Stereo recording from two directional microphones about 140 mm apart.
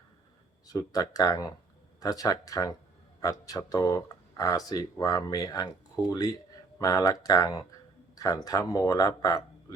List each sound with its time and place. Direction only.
0.7 s a man's voice: 25° left (ahead or behind)